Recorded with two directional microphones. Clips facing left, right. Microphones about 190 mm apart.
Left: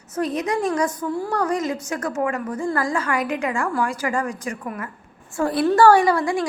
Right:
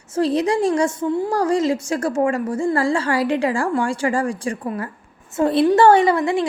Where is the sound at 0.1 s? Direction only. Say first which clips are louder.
Right 5 dB; 30° right (ahead or behind).